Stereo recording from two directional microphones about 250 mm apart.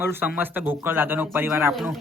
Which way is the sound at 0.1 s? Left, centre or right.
Centre.